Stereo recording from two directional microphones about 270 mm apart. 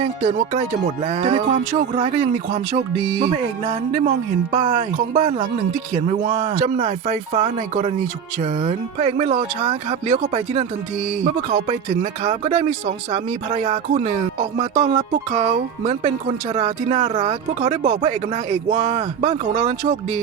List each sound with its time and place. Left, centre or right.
0.0 s speech: right
16.6 s speech: right